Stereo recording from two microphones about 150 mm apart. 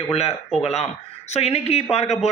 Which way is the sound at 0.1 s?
45° left (ahead or behind).